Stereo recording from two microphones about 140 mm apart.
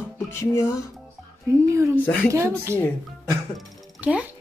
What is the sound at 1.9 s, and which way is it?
Speech, 10° left (ahead or behind).